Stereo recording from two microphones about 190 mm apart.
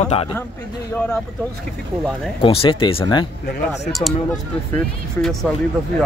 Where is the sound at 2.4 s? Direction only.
30° left (ahead or behind).